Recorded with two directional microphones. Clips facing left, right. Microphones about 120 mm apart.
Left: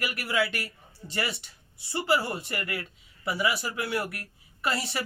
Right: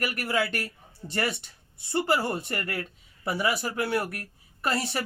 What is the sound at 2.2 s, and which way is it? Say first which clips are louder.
A woman's voice: right 3 dB; 50° right (ahead or behind).